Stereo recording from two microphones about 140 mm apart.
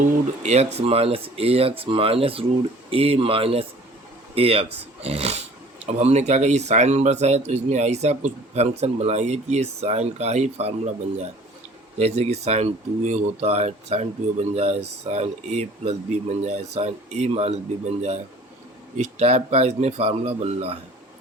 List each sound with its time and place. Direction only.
0.0 s speech: 60° right (ahead or behind)
11.9 s speech: 50° right (ahead or behind)